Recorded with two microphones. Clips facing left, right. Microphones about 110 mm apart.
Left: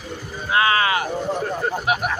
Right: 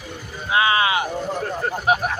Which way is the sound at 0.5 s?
20° right (ahead or behind).